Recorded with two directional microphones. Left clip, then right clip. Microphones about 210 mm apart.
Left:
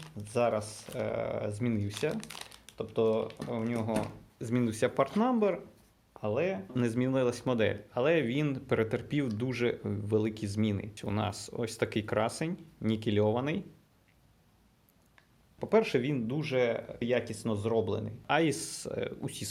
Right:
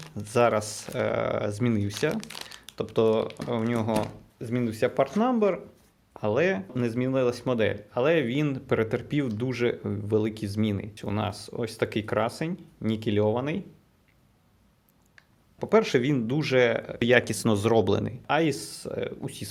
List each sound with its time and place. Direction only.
0.2 s speech: 35° right (ahead or behind)
2.2 s speech: 5° right (ahead or behind)
2.7 s speech: 35° right (ahead or behind)
4.4 s speech: 5° left (ahead or behind)
6.1 s speech: 30° right (ahead or behind)
6.7 s speech: centre (ahead or behind)
15.1 s speech: 15° right (ahead or behind); by 18.1 s 40° right (ahead or behind)
18.3 s speech: 5° right (ahead or behind)